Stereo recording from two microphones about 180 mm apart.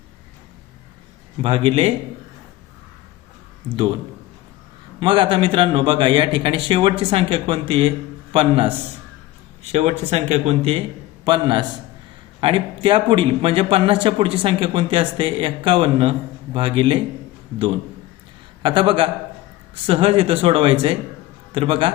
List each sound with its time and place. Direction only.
1.4 s speech: 30° right (ahead or behind)
4.9 s a man's voice: 25° right (ahead or behind)
9.7 s a man's voice: 40° right (ahead or behind)
18.6 s a man's voice: 25° right (ahead or behind)